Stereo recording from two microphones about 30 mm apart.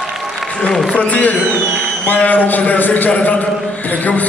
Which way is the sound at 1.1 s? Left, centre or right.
Left.